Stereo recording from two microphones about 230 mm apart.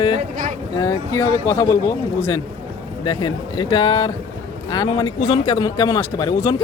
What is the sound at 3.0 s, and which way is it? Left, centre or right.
A man's voice, centre.